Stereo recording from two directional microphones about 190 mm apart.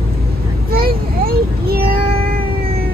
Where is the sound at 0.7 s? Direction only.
50° right (ahead or behind).